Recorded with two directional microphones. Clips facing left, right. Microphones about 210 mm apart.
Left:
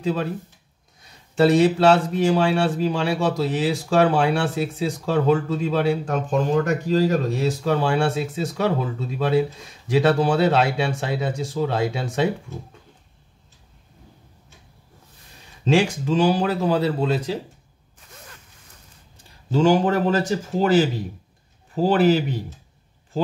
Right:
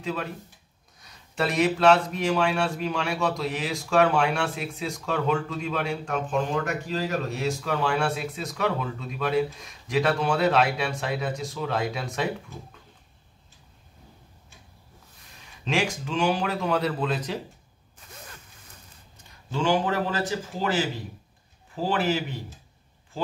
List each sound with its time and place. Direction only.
0.0 s speech: 35° left (ahead or behind)
15.6 s speech: 35° left (ahead or behind)
19.5 s speech: 40° left (ahead or behind)